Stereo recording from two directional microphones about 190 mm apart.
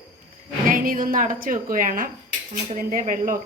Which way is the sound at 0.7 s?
50° right (ahead or behind).